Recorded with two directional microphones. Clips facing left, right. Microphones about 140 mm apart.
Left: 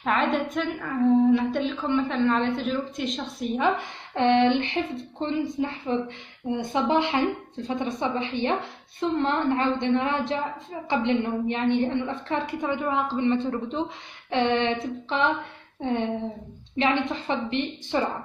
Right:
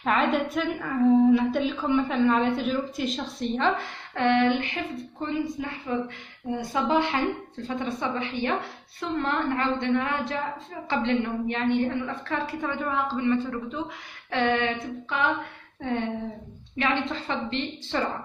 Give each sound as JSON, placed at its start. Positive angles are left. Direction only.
{"t": 0.0, "sound": "a woman's voice", "side_deg": 0}